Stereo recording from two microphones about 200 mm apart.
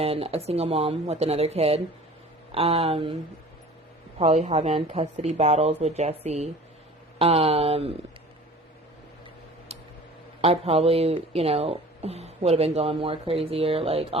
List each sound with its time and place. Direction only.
0.0 s a woman's voice: 30° right (ahead or behind)
4.2 s a woman's voice: 30° right (ahead or behind)
10.4 s a woman's voice: 30° right (ahead or behind)